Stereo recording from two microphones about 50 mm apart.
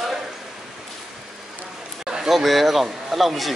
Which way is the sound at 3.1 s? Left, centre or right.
Centre.